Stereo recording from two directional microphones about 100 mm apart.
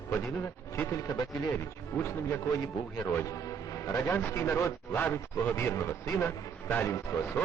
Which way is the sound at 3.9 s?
20° left (ahead or behind).